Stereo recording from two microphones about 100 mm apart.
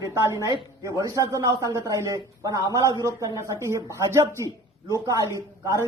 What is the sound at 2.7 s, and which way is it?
A man's voice, 35° right (ahead or behind).